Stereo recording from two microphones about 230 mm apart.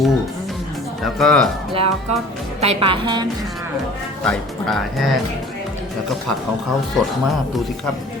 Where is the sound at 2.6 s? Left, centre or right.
Right.